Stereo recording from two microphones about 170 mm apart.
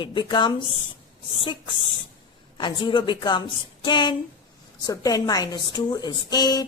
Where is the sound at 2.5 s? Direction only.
30° left (ahead or behind).